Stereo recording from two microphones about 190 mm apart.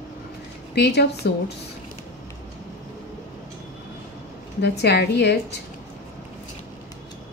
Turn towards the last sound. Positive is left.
turn(degrees=60)  # may be behind; listen again after turning